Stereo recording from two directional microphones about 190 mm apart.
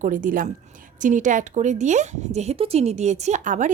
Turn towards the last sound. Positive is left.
turn(degrees=-40)  # may be behind; listen again after turning